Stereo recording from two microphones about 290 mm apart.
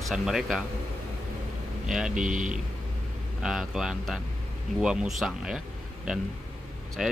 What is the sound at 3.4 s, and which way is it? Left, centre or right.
Speech, centre.